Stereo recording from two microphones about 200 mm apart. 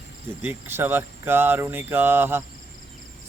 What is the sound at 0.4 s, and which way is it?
Speech, 10° right (ahead or behind).